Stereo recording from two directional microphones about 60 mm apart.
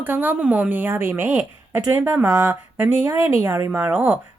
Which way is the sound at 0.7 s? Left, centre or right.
Right.